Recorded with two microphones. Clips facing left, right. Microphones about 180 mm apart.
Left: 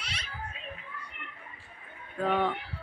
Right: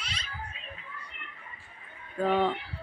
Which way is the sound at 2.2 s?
Centre (ahead or behind).